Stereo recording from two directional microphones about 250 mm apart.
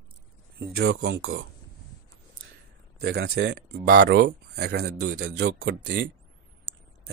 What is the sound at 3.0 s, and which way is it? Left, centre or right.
Speech, right.